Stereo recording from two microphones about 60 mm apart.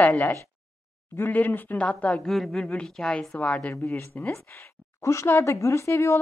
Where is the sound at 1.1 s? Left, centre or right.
Left.